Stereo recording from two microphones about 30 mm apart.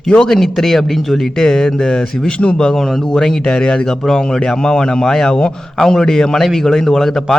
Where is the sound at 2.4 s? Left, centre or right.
Left.